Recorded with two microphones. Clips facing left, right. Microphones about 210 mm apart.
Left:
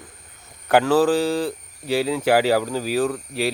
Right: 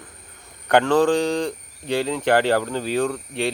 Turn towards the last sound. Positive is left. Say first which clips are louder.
# left 1 dB
turn(degrees=5)  # may be behind; listen again after turning